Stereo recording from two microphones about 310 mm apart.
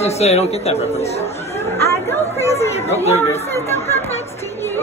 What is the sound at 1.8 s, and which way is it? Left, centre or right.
Chatter, centre.